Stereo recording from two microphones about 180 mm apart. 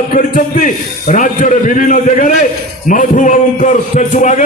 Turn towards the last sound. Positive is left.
turn(degrees=45)  # may be behind; listen again after turning